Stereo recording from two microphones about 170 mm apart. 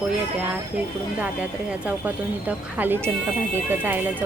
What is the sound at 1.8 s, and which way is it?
Speech, 10° right (ahead or behind).